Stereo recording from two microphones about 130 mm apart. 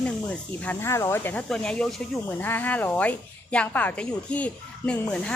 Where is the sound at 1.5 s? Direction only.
5° left (ahead or behind).